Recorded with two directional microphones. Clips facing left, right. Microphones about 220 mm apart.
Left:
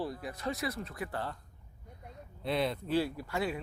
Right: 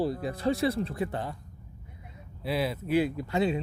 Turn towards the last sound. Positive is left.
turn(degrees=-20)  # may be behind; listen again after turning